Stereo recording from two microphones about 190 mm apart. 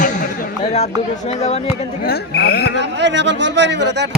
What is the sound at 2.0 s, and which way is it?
Speech, 55° left (ahead or behind).